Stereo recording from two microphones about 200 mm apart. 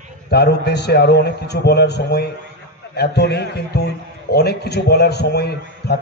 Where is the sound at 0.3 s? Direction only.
55° left (ahead or behind).